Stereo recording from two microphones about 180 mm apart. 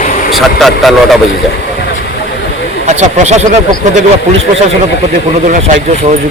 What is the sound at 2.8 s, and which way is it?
Speech, 40° right (ahead or behind).